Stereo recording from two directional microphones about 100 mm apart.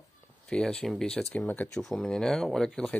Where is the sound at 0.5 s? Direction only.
10° left (ahead or behind).